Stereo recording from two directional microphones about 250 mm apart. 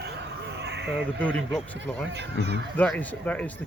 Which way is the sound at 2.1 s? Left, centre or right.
Right.